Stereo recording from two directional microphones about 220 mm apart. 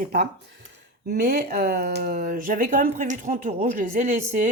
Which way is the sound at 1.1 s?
45° right (ahead or behind).